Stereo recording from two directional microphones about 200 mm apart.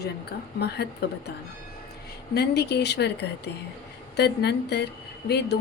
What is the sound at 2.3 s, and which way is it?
Speech, 55° left (ahead or behind).